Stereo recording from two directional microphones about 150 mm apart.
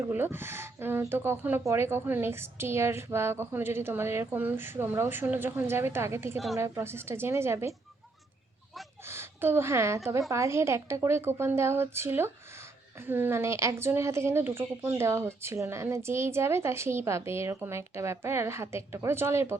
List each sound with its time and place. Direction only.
0.0 s a woman's voice: 15° right (ahead or behind)
9.0 s a woman's voice: 15° right (ahead or behind)